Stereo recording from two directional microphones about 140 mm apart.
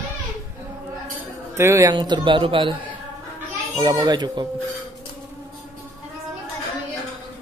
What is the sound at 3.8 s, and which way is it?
Speech, 30° right (ahead or behind).